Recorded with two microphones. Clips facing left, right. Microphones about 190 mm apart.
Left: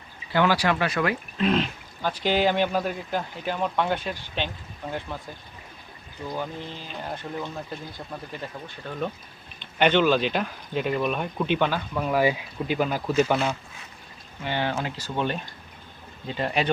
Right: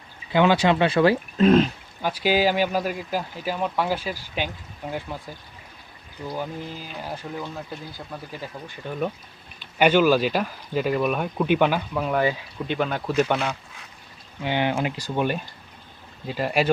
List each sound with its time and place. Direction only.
0.3 s speech: 20° right (ahead or behind)
1.4 s speech: 45° right (ahead or behind)
2.0 s speech: 10° right (ahead or behind)
6.2 s speech: 5° right (ahead or behind)
8.8 s speech: 15° right (ahead or behind)
12.0 s speech: 5° left (ahead or behind)
14.4 s speech: 15° right (ahead or behind)